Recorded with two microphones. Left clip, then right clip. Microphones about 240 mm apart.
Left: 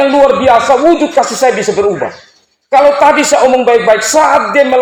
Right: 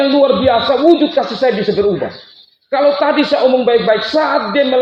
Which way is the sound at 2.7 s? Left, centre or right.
Left.